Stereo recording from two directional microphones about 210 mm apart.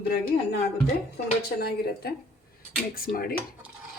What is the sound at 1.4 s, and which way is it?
A woman's voice, 50° left (ahead or behind).